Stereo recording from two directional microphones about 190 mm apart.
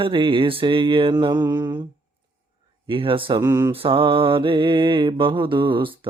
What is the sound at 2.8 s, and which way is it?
Mantra, 25° right (ahead or behind).